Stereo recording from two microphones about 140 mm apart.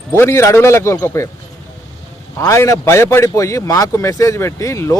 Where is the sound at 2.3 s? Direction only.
20° left (ahead or behind).